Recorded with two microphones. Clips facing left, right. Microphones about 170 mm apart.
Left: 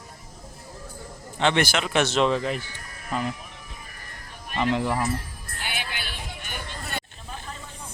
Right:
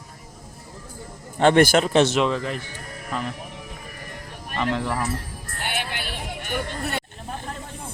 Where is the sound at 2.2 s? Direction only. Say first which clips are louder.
Left 1 dB; centre (ahead or behind).